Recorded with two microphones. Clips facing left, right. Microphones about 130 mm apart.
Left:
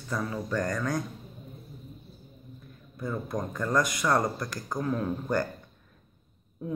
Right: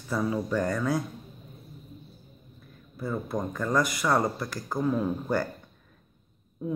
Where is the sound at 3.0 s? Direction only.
5° right (ahead or behind).